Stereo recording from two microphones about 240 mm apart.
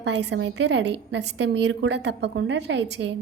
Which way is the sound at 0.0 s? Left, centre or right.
Right.